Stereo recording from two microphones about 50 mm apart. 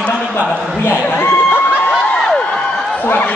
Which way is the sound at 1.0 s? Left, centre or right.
Left.